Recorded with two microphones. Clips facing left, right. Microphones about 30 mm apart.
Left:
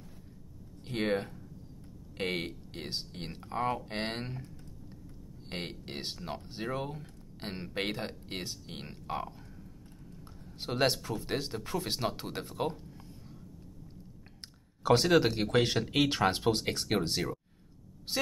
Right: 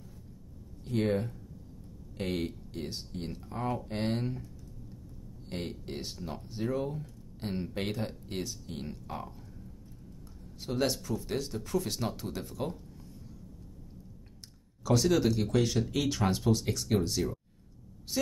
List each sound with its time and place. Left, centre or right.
0.8 s speech: left
5.5 s speech: left
7.0 s speech: left
10.6 s speech: left
14.8 s speech: left